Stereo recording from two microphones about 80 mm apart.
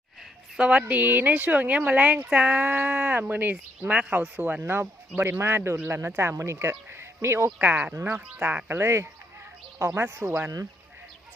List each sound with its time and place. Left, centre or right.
0.5 s speech: centre; by 7.5 s right
7.6 s speech: centre
8.8 s speech: right